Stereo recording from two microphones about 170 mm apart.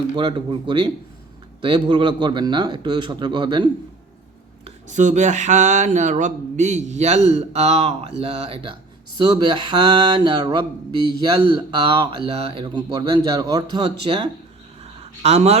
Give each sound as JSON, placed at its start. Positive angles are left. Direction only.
{"t": 0.2, "sound": "mantra", "side_deg": -30}
{"t": 4.6, "sound": "speech", "side_deg": -45}
{"t": 9.1, "sound": "mantra", "side_deg": -25}
{"t": 14.0, "sound": "speech", "side_deg": -30}